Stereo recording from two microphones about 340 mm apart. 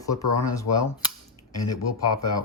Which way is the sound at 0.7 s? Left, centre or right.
Left.